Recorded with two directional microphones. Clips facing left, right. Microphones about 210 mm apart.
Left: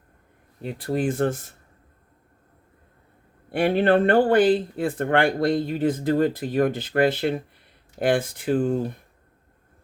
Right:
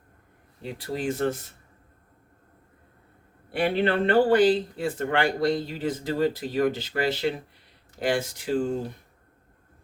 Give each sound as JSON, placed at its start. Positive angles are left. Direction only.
{"t": 0.6, "sound": "speech", "side_deg": 50}
{"t": 3.5, "sound": "speech", "side_deg": 50}